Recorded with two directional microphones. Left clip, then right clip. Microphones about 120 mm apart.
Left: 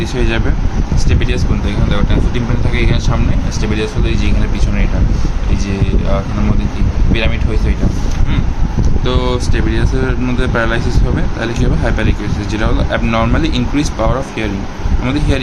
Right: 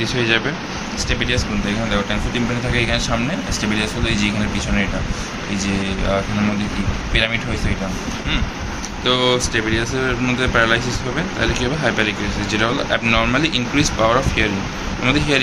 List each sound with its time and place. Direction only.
0.2 s speech: 25° left (ahead or behind)
2.7 s speech: 20° left (ahead or behind)
9.0 s speech: 15° left (ahead or behind)